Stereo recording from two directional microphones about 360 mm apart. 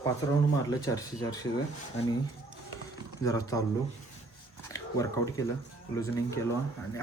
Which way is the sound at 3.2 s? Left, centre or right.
Centre.